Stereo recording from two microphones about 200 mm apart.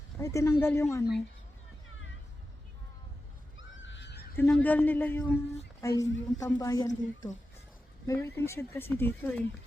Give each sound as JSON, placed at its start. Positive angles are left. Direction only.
{"t": 0.2, "sound": "a woman's voice", "side_deg": 15}
{"t": 3.6, "sound": "neigh", "side_deg": 65}
{"t": 4.4, "sound": "a woman's voice", "side_deg": 5}